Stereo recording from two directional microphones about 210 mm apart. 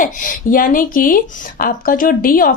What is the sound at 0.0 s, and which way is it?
Speech, 40° left (ahead or behind).